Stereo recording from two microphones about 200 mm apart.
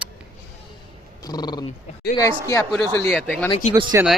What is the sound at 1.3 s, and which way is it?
Speech, 20° left (ahead or behind).